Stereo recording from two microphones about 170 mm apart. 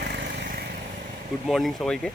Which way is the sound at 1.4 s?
Centre (ahead or behind).